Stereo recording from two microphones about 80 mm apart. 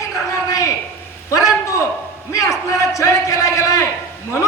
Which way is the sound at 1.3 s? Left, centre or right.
Left.